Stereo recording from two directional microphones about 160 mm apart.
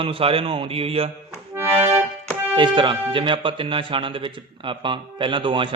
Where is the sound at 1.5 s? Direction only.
15° right (ahead or behind).